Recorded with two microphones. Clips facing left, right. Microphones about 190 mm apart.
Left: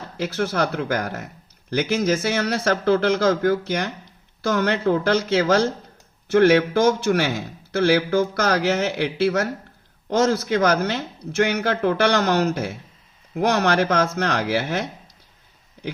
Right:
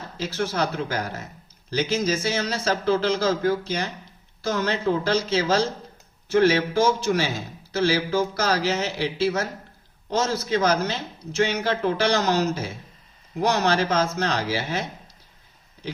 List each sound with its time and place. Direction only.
0.2 s a man's voice: 60° left (ahead or behind)